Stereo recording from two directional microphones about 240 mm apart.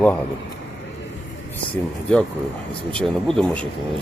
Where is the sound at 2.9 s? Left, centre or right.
Centre.